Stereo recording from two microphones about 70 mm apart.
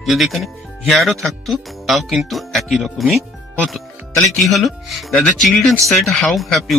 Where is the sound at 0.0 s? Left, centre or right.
Centre.